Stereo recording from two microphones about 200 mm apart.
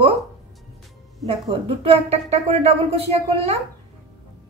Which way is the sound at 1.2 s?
30° right (ahead or behind).